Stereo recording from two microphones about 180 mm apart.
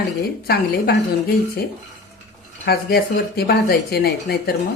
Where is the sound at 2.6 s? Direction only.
60° left (ahead or behind).